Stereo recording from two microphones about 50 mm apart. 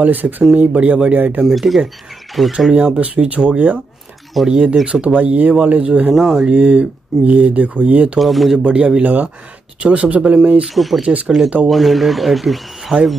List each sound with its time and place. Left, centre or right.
0.0 s speech: right
1.5 s speech: centre
2.7 s speech: right
6.1 s speech: centre
6.5 s speech: right
8.2 s speech: centre
8.6 s speech: right
10.7 s speech: centre
11.0 s speech: centre
11.6 s speech: centre